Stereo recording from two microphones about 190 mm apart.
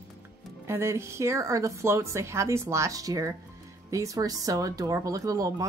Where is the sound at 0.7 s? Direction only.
15° right (ahead or behind).